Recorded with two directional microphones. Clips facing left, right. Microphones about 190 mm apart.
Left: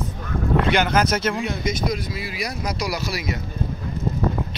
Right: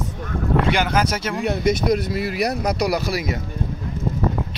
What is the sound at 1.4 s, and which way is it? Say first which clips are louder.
Speech: right 5 dB; 60° right (ahead or behind).